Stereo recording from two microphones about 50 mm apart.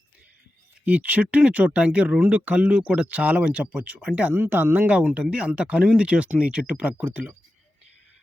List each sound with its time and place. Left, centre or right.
0.9 s speech: right
4.9 s speech: right